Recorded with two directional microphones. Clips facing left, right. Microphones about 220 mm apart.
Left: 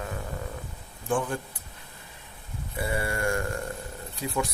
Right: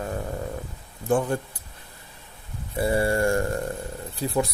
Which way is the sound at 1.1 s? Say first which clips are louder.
Right 5 dB; 40° right (ahead or behind).